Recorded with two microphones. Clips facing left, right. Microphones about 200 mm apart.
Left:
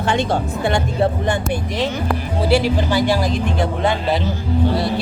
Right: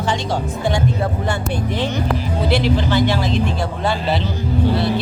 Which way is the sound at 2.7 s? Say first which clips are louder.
Even; 10° left (ahead or behind).